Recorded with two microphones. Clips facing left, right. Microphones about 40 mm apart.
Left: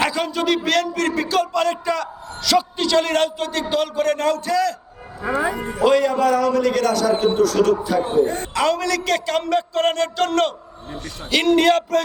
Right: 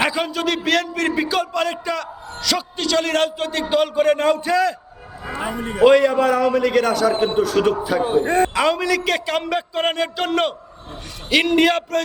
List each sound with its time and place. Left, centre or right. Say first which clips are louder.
0.0 s a sound: right 1 dB; centre
0.3 s a man's voice: even; centre; by 4.7 s right
5.8 s a man's voice: right 3 dB; centre
7.8 s a man's voice: right 1 dB; centre
8.2 s a man's voice: right 2 dB; right
8.5 s a man's voice: right 1 dB; centre